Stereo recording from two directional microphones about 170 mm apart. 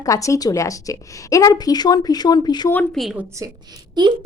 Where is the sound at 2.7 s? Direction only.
5° left (ahead or behind).